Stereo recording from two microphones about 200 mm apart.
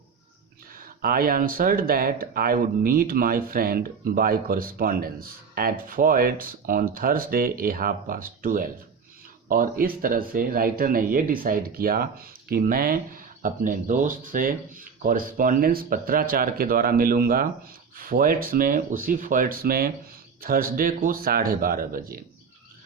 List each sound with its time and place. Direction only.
0.8 s speech: 45° right (ahead or behind)